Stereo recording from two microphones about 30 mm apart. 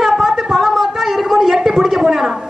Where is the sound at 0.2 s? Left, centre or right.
Centre.